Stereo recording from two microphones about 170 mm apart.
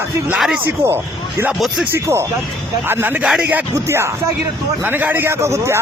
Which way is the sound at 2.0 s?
15° right (ahead or behind).